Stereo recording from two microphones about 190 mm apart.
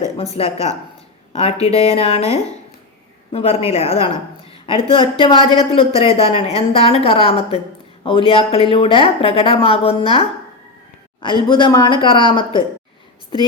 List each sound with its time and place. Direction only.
0.0 s a woman's voice: 30° left (ahead or behind)